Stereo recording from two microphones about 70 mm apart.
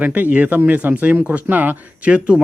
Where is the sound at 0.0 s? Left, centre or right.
Right.